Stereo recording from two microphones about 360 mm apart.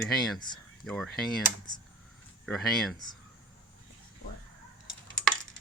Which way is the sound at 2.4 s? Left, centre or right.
Centre.